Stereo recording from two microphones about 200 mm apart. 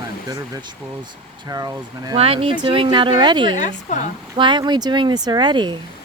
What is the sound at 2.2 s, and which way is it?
Speech, 30° right (ahead or behind).